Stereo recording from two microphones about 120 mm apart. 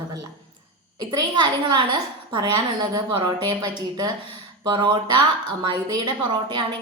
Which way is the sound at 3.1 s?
40° right (ahead or behind).